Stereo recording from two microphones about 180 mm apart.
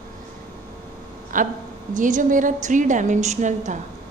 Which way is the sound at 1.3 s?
50° right (ahead or behind).